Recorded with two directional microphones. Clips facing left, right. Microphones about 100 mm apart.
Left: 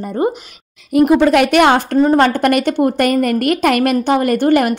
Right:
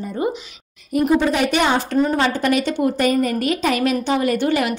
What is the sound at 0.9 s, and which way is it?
A woman's voice, 75° left (ahead or behind).